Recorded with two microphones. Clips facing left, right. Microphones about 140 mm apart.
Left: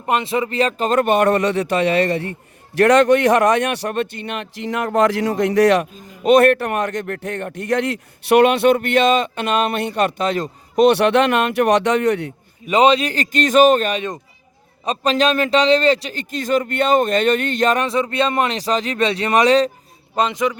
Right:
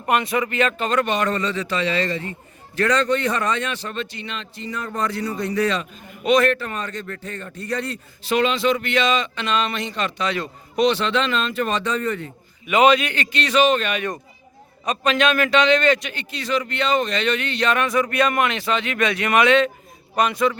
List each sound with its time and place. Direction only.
0.0 s a man's voice: 25° left (ahead or behind); by 5.9 s 75° left (ahead or behind)
6.2 s speech: 60° left (ahead or behind)
10.9 s a man's voice: 65° left (ahead or behind)
12.6 s speech: 30° left (ahead or behind)
13.9 s speech: 20° left (ahead or behind)
14.8 s a man's voice: 35° left (ahead or behind)
17.8 s speech: 25° left (ahead or behind)
20.1 s a man's voice: 20° left (ahead or behind)